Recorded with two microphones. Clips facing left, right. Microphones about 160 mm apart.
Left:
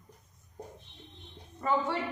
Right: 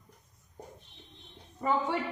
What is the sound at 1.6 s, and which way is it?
Speech, 15° right (ahead or behind).